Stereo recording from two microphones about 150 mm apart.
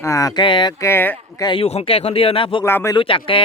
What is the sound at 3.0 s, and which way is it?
Speech, 35° left (ahead or behind).